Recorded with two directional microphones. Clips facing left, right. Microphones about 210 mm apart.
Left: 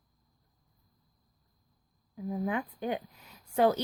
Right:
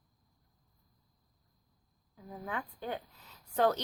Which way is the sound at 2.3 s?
15° left (ahead or behind).